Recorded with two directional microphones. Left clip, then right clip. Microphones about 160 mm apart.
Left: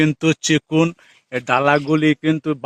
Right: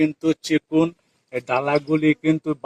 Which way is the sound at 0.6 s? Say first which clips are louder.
Left 2 dB; 60° left (ahead or behind).